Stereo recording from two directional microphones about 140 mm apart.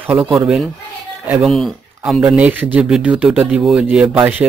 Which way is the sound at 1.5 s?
Centre (ahead or behind).